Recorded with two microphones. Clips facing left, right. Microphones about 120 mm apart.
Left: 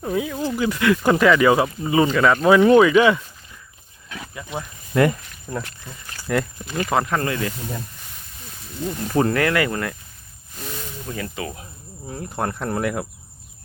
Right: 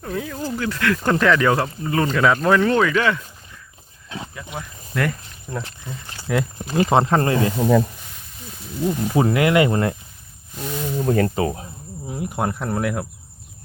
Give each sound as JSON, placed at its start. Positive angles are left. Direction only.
{"t": 0.0, "sound": "speech", "side_deg": 10}
{"t": 2.6, "sound": "speech", "side_deg": 15}
{"t": 4.1, "sound": "speech", "side_deg": -30}
{"t": 4.5, "sound": "speech", "side_deg": 20}
{"t": 5.5, "sound": "speech", "side_deg": 0}
{"t": 5.9, "sound": "speech", "side_deg": -20}
{"t": 6.6, "sound": "speech", "side_deg": -35}
{"t": 7.5, "sound": "speech", "side_deg": -90}
{"t": 8.8, "sound": "speech", "side_deg": -10}
{"t": 10.9, "sound": "speech", "side_deg": -50}
{"t": 12.0, "sound": "speech", "side_deg": -10}